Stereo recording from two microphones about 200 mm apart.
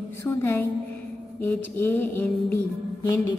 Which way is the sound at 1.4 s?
10° left (ahead or behind).